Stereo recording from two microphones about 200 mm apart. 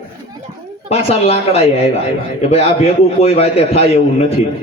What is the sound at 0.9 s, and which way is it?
A man's voice, 30° left (ahead or behind).